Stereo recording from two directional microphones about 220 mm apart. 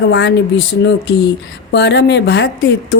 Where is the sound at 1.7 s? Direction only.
50° left (ahead or behind).